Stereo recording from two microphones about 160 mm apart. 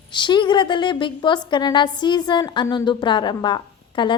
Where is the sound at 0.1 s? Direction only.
30° left (ahead or behind).